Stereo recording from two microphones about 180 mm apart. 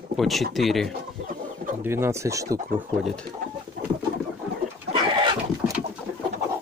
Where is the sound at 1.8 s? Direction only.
15° right (ahead or behind).